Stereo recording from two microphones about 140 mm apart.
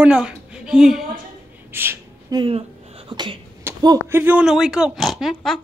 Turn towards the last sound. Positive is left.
turn(degrees=0)  # may be behind; listen again after turning